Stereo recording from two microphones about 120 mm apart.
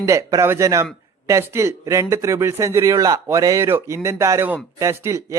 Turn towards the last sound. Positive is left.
turn(degrees=-25)  # may be behind; listen again after turning